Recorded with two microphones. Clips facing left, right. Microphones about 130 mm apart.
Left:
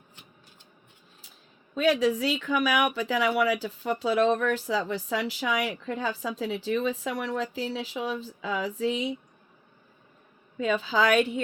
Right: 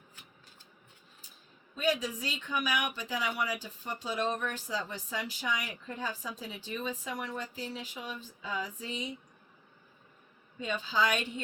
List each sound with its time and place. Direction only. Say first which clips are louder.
1.7 s speech: left 8 dB; 90° left